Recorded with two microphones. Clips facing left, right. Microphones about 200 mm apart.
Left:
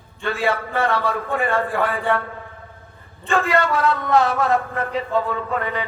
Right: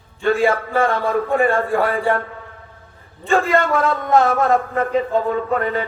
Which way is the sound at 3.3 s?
50° right (ahead or behind).